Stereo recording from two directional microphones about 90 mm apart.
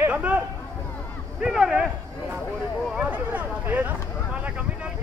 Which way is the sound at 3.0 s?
15° right (ahead or behind).